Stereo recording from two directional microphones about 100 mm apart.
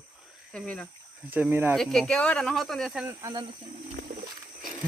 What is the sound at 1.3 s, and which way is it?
Speech, 20° right (ahead or behind).